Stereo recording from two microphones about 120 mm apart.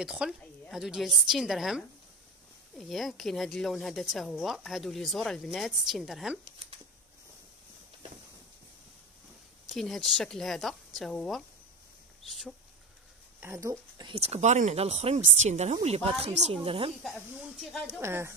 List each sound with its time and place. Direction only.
0.0 s speech: 5° right (ahead or behind)
9.7 s speech: centre (ahead or behind)
13.4 s speech: 25° right (ahead or behind)
14.0 s speech: 60° right (ahead or behind)
17.0 s speech: 5° left (ahead or behind)
18.0 s speech: 20° right (ahead or behind)